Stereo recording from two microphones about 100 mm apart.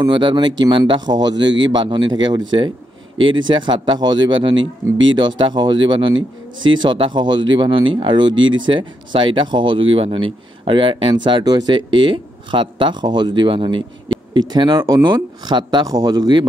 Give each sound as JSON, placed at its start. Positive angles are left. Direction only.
{"t": 0.1, "sound": "speech", "side_deg": -55}
{"t": 14.4, "sound": "speech", "side_deg": -45}